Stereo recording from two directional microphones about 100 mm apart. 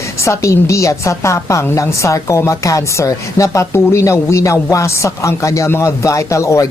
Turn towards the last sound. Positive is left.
turn(degrees=30)  # may be behind; listen again after turning